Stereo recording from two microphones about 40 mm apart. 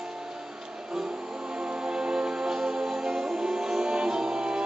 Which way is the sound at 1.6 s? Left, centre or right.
Centre.